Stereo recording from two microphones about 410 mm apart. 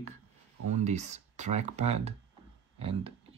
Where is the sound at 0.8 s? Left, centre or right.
Centre.